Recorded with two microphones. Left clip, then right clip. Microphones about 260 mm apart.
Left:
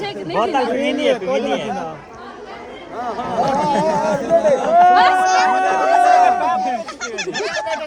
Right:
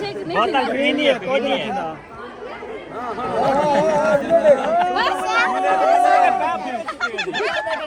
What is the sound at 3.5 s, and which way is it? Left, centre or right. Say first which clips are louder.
Speech: right 1 dB; left.